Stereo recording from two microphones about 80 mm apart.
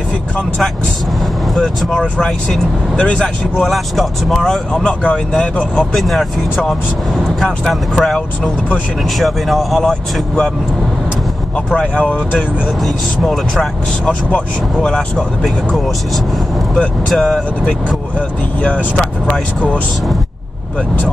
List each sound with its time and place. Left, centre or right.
1.5 s speech: centre
3.5 s speech: centre
5.9 s speech: centre
9.2 s speech: centre
11.7 s speech: centre
12.4 s speech: centre
14.0 s speech: centre
17.1 s speech: centre
18.6 s speech: centre
18.9 s speech: centre